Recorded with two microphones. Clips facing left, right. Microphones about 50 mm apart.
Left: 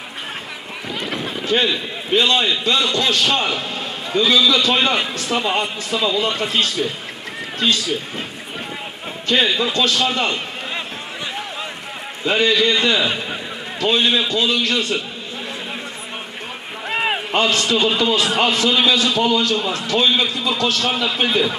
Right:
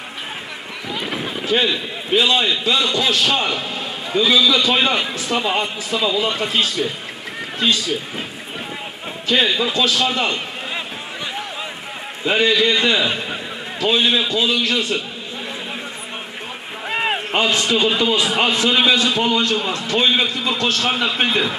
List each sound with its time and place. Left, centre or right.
0.9 s a man's voice: centre
9.3 s a man's voice: centre
12.3 s a man's voice: centre
16.8 s a sound: centre
17.3 s a man's voice: centre